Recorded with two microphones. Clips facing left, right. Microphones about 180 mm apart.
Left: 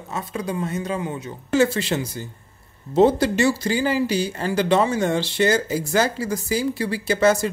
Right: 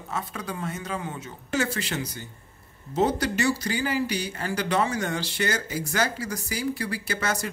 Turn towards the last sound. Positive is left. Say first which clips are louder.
# left 11 dB
turn(degrees=25)  # may be behind; listen again after turning